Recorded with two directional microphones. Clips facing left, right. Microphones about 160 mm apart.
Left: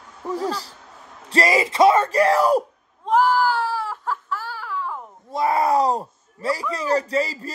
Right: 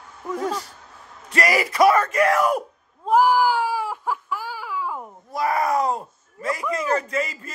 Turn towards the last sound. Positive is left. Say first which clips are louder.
# left 3 dB
turn(degrees=35)  # may be behind; listen again after turning